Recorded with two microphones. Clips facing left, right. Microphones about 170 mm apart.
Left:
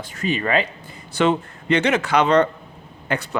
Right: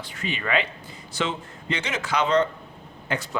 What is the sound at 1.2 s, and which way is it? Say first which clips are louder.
Speech: left 9 dB; 60° left (ahead or behind).